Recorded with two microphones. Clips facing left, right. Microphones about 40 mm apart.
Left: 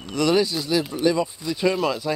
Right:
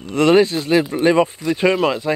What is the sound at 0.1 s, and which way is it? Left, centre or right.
Speech, right.